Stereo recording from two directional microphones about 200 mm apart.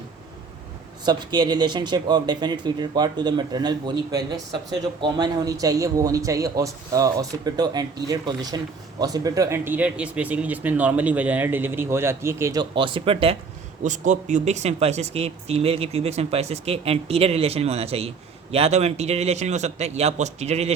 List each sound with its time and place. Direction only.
1.0 s speech: 20° right (ahead or behind)
13.8 s speech: 40° right (ahead or behind)